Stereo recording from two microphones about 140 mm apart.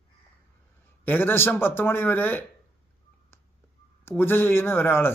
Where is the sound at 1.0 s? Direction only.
15° left (ahead or behind).